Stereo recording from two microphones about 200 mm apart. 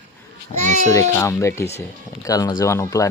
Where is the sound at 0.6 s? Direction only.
40° right (ahead or behind).